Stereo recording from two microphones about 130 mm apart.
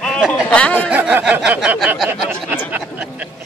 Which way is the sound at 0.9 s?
10° right (ahead or behind).